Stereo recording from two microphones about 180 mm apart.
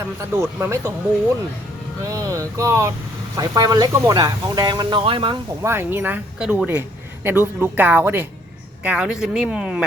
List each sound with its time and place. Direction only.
0.0 s speech: 15° right (ahead or behind)
2.0 s speech: 20° right (ahead or behind)
5.6 s speech: 10° right (ahead or behind)